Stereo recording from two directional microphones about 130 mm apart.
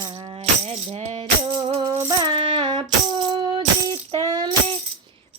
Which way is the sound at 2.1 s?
40° right (ahead or behind).